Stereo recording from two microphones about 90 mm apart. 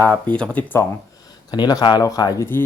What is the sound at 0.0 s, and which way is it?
Speech, 15° left (ahead or behind).